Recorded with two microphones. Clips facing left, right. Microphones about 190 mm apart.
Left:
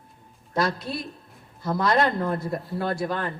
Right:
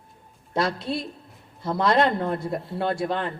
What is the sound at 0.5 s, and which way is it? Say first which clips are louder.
A woman's voice: right 1 dB; 25° right (ahead or behind).